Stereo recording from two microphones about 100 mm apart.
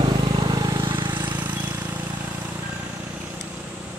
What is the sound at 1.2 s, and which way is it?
Vehicle, 20° right (ahead or behind).